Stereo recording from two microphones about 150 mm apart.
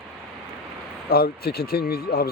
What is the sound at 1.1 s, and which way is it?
Speech, 90° left.